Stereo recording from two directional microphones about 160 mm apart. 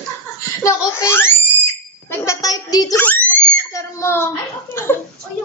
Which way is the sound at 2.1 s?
15° left (ahead or behind).